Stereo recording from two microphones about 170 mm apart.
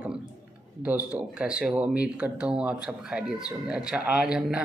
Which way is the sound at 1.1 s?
5° right (ahead or behind).